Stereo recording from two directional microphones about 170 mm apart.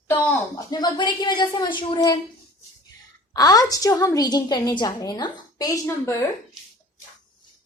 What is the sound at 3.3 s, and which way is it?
A woman's voice, 20° left (ahead or behind).